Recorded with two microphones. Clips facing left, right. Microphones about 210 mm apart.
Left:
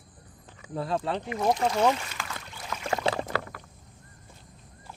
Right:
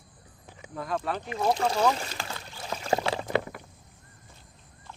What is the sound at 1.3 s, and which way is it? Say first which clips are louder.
Speech: even; 30° right (ahead or behind).